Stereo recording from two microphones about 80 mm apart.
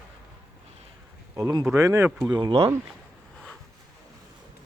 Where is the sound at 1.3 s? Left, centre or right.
Right.